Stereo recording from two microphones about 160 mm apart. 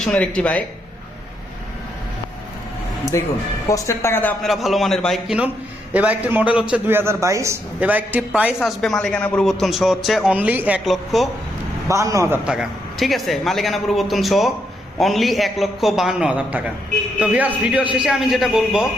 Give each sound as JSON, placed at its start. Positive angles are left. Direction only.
{"t": 0.0, "sound": "speech", "side_deg": 5}
{"t": 3.1, "sound": "speech", "side_deg": 20}
{"t": 4.4, "sound": "a man's voice", "side_deg": 0}
{"t": 8.6, "sound": "a man's voice", "side_deg": 5}
{"t": 11.9, "sound": "a man's voice", "side_deg": -20}
{"t": 12.5, "sound": "a man's voice", "side_deg": 0}